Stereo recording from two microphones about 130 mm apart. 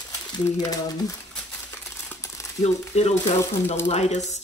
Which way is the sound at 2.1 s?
20° left (ahead or behind).